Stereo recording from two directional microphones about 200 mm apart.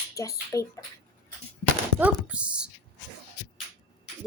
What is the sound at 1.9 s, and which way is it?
Speech, 5° right (ahead or behind).